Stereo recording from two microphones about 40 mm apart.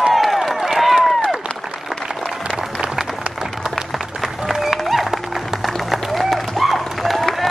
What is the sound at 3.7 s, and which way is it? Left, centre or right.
Applause, centre.